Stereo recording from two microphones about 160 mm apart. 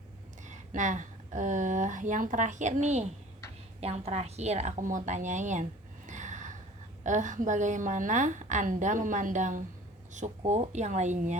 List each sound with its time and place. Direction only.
0.4 s a woman's voice: 50° right (ahead or behind)
6.1 s gasp: 50° right (ahead or behind)
7.0 s a woman's voice: 50° right (ahead or behind)